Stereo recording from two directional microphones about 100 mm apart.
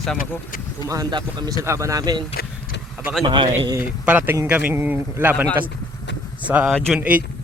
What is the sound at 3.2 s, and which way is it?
Speech, 50° right (ahead or behind).